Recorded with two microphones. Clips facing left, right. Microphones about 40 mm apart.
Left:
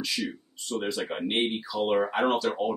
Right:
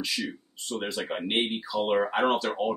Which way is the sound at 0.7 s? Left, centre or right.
Centre.